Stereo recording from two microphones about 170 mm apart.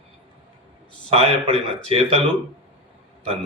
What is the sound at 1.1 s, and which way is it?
Speech, 35° right (ahead or behind).